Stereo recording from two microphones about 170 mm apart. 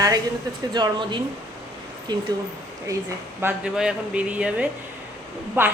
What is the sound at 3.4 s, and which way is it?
A woman's voice, 10° right (ahead or behind).